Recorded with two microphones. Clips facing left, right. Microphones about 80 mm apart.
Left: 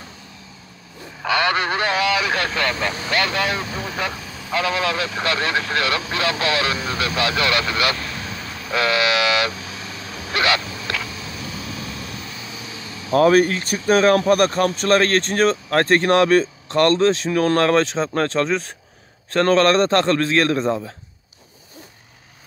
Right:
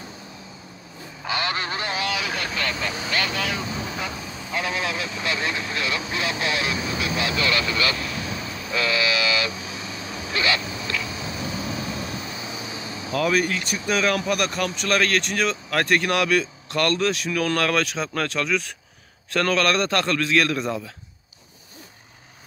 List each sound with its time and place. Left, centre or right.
1.2 s speech: left
3.7 s vehicle: left
4.1 s vehicle: centre
4.5 s speech: left
8.5 s vehicle: left
9.5 s honk: centre
10.3 s speech: left
10.6 s goose: centre
11.1 s vehicle: centre
13.1 s speech: left